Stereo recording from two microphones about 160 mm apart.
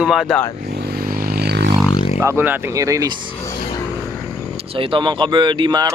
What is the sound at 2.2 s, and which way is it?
Speech, 15° right (ahead or behind).